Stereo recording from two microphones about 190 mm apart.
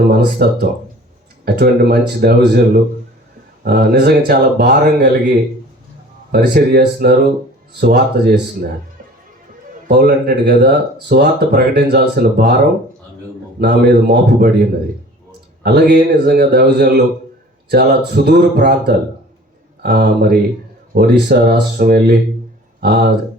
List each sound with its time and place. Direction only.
0.1 s speech: 55° right (ahead or behind)
6.3 s a man's voice: 55° right (ahead or behind)
9.9 s speech: 55° right (ahead or behind)
13.6 s a man's voice: 55° right (ahead or behind)